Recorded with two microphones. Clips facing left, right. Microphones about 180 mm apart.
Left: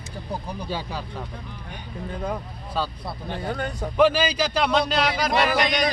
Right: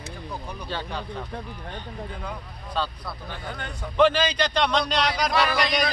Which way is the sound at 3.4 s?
40° left (ahead or behind).